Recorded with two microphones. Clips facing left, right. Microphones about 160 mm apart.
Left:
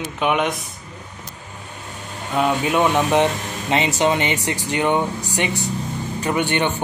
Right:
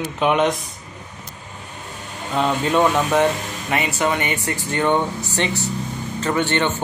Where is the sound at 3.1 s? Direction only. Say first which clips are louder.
Even; 20° left (ahead or behind).